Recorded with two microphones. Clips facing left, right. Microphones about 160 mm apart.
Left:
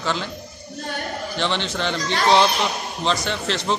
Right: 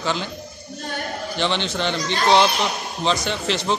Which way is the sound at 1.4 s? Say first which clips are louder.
Right 1 dB; centre (ahead or behind).